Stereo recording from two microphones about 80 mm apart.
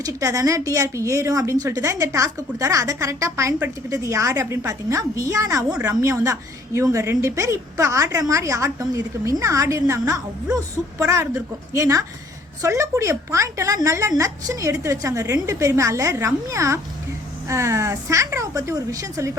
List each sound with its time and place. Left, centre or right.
0.0 s a woman's voice: right